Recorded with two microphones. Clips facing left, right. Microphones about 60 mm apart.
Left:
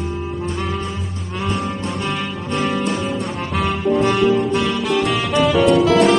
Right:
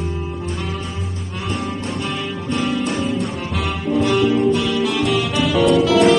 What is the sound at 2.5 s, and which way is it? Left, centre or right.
Music, left.